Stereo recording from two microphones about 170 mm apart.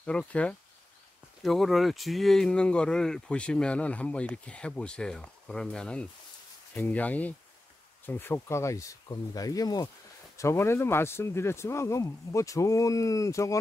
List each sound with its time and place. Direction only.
0.0 s speech: 5° left (ahead or behind)